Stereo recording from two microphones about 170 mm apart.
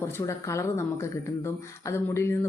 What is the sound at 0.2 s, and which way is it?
A woman's voice, 15° left (ahead or behind).